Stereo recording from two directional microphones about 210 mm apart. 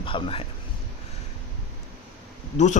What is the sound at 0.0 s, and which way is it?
Speech, 25° left (ahead or behind).